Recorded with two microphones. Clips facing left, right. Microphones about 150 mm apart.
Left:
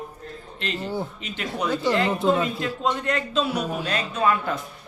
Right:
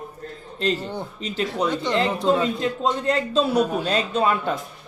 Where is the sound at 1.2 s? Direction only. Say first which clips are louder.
Right 7 dB; 35° right (ahead or behind).